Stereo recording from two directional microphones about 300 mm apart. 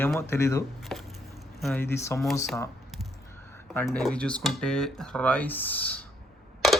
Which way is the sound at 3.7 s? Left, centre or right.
Centre.